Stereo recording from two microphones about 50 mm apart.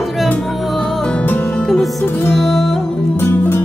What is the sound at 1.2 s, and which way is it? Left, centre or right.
Music, left.